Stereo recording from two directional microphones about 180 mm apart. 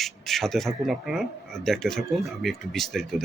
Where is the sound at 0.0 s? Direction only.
Centre (ahead or behind).